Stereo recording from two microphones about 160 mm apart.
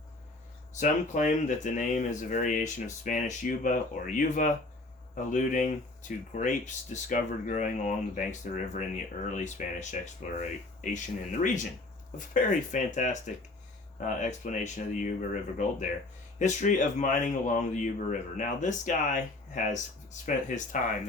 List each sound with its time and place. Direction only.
0.8 s speech: 50° left (ahead or behind)